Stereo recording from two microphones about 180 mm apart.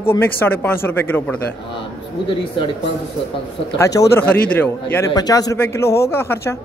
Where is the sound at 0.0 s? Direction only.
10° left (ahead or behind).